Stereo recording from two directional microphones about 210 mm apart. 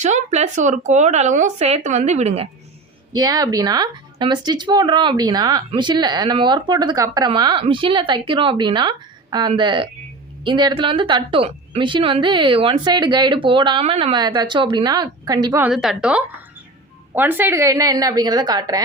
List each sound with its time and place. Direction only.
0.0 s speech: 35° right (ahead or behind)
3.2 s speech: 15° right (ahead or behind)
15.6 s a woman's voice: centre (ahead or behind); by 18.8 s 20° right (ahead or behind)